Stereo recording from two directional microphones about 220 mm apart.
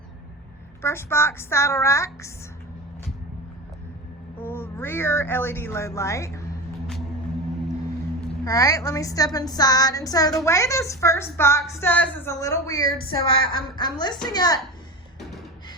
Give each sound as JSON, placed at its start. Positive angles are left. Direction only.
{"t": 0.8, "sound": "speech", "side_deg": 10}
{"t": 4.4, "sound": "speech", "side_deg": 10}
{"t": 8.4, "sound": "a woman's voice", "side_deg": 15}